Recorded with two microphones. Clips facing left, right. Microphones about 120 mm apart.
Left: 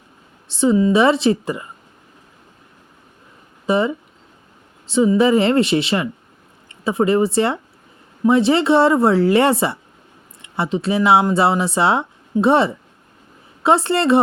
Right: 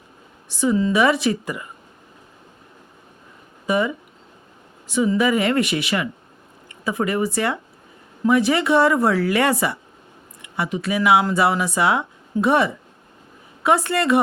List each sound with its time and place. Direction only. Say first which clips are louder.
0.4 s speech: left 4 dB; 25° left (ahead or behind)
3.7 s speech: left 3 dB; 30° left (ahead or behind)